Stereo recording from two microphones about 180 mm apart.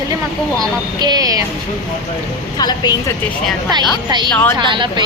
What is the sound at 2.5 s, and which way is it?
Speech, 25° left (ahead or behind).